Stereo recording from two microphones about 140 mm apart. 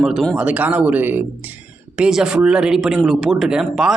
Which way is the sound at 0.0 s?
Centre (ahead or behind).